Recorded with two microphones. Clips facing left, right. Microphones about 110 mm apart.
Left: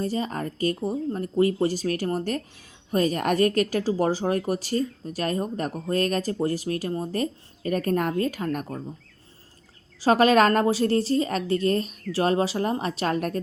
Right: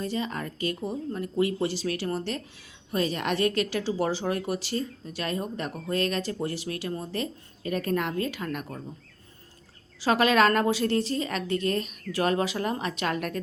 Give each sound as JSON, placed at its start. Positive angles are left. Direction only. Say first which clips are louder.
{"t": 0.0, "sound": "speech", "louder": "left 3 dB", "side_deg": 40}
{"t": 10.0, "sound": "speech", "louder": "left 4 dB", "side_deg": 40}